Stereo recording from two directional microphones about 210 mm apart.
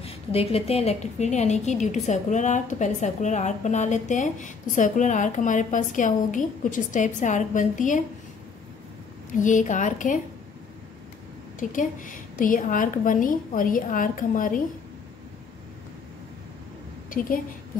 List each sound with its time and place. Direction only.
0.0 s a woman's voice: 25° left (ahead or behind)
9.3 s a woman's voice: 35° left (ahead or behind)
11.7 s a woman's voice: 40° left (ahead or behind)
17.1 s a woman's voice: 40° left (ahead or behind)